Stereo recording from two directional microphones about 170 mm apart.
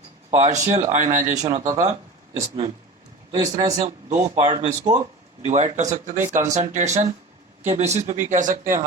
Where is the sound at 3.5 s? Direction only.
40° right (ahead or behind).